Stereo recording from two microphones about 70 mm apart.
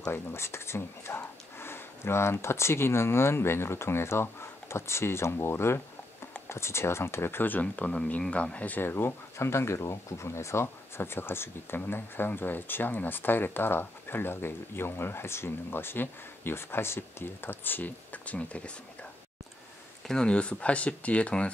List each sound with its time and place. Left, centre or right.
0.1 s speech: left
7.6 s speech: centre
20.1 s speech: centre